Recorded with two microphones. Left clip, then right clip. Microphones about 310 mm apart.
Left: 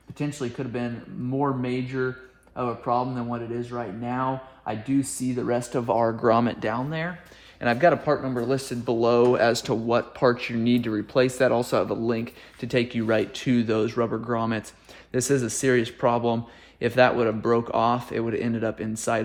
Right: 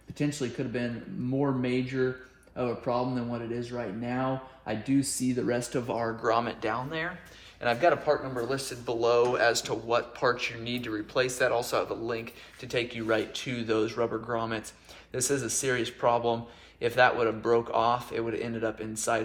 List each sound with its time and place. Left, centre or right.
0.2 s speech: centre
2.6 s speech: centre